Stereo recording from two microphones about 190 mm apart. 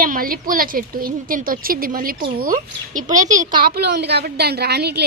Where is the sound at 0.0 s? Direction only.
50° right (ahead or behind).